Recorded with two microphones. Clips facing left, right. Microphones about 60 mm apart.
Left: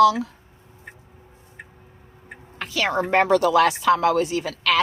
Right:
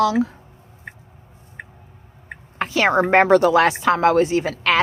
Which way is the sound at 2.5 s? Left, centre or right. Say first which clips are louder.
Right 6 dB; right.